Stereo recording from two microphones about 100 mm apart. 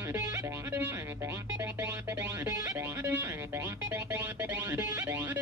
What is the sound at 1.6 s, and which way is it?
Music, 30° right (ahead or behind).